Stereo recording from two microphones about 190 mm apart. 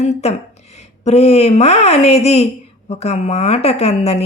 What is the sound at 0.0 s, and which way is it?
Speech, 35° left (ahead or behind).